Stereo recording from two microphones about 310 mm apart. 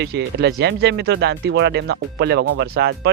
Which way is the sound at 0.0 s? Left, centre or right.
Right.